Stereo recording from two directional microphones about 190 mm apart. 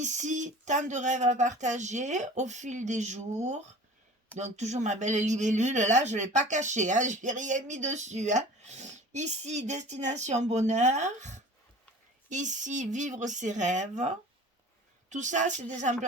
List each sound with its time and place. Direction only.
0.0 s speech: 40° right (ahead or behind)
15.1 s speech: 40° right (ahead or behind)